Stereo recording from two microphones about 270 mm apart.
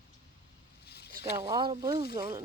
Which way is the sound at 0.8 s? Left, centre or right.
Left.